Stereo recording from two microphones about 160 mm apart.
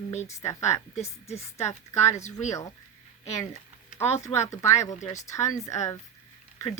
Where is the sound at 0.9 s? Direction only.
45° left (ahead or behind).